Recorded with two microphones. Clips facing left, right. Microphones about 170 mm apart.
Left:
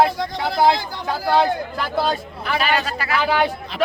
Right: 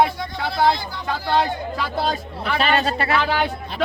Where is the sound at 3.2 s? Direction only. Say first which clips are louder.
Left 3 dB; 5° left (ahead or behind).